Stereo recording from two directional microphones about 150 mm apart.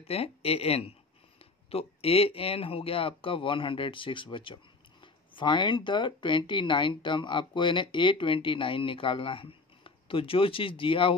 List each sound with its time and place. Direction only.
0.0 s speech: 40° left (ahead or behind)